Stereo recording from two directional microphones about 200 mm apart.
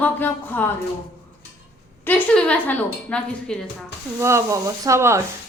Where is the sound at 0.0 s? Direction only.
10° left (ahead or behind).